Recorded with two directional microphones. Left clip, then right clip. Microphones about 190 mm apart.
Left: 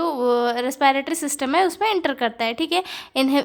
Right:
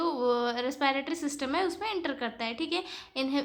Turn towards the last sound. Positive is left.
turn(degrees=40)  # may be behind; listen again after turning